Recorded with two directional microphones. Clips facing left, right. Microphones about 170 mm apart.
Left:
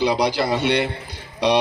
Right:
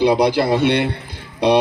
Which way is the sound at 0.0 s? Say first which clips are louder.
Right 5 dB; 55° right (ahead or behind).